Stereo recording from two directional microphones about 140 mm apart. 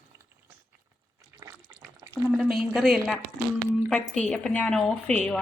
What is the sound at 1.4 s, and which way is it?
Water, 25° right (ahead or behind).